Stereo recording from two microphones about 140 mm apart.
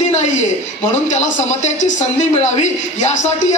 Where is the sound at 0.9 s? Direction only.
60° left (ahead or behind).